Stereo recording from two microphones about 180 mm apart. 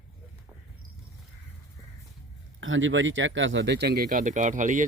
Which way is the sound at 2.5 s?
90° right.